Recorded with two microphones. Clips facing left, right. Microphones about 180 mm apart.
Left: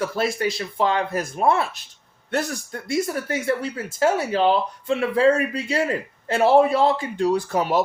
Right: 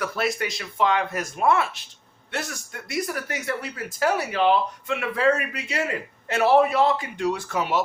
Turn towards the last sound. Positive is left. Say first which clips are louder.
# left 4 dB
turn(degrees=35)  # may be behind; listen again after turning